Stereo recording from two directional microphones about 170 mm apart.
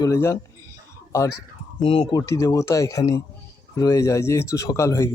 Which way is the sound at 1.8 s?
30° left (ahead or behind).